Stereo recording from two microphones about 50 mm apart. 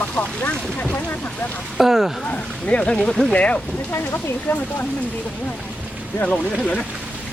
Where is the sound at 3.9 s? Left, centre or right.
Left.